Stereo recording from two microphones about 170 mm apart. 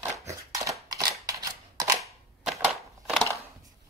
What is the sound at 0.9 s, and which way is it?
Scissors, 20° right (ahead or behind).